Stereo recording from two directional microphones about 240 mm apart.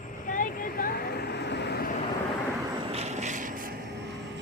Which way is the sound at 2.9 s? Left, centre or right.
Right.